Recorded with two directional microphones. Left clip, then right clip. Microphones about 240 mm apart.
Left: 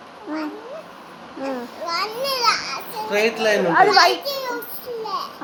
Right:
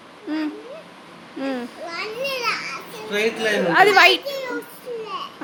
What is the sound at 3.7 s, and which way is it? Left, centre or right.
Speech, right.